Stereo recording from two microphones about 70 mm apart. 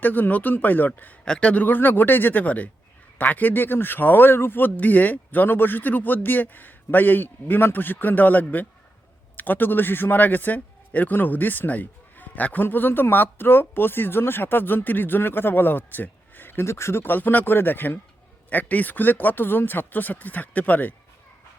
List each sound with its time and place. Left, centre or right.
0.0 s a man's voice: left
1.2 s a man's voice: centre